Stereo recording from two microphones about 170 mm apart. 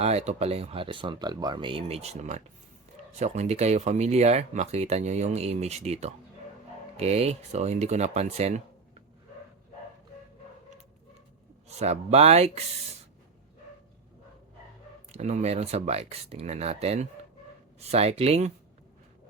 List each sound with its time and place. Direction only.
0.0 s speech: 40° right (ahead or behind)
11.7 s speech: 40° right (ahead or behind)
15.1 s speech: 40° right (ahead or behind)